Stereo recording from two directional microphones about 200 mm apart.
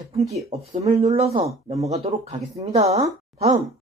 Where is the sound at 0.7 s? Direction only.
30° right (ahead or behind).